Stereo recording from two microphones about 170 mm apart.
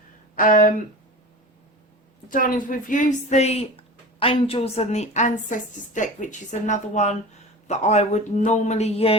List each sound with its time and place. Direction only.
0.3 s speech: 50° left (ahead or behind)
2.3 s a woman's voice: 50° left (ahead or behind); by 9.1 s 35° left (ahead or behind)